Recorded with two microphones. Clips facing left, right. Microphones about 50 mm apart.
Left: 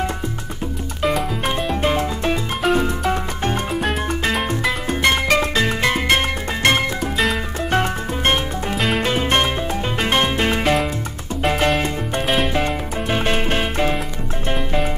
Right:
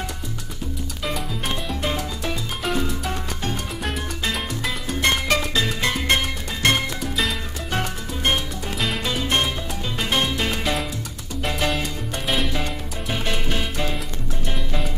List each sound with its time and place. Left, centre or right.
1.0 s music: centre
1.7 s music: left
8.7 s music: centre
9.0 s music: left